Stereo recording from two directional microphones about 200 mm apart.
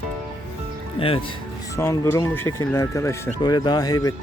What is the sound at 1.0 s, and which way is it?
Speech, 25° left (ahead or behind).